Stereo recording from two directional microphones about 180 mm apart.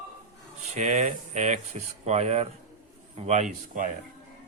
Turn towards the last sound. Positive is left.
turn(degrees=-45)  # may be behind; listen again after turning